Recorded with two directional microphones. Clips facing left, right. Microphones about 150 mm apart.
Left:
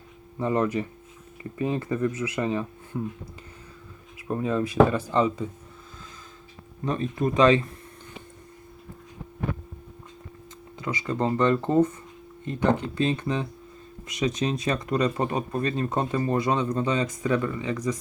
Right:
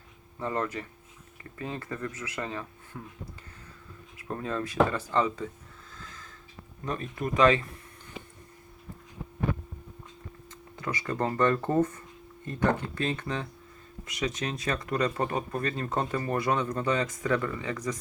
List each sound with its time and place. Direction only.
0.3 s speech: 15° left (ahead or behind)
4.2 s speech: 15° left (ahead or behind)
6.8 s speech: 20° left (ahead or behind)
10.8 s speech: 15° left (ahead or behind)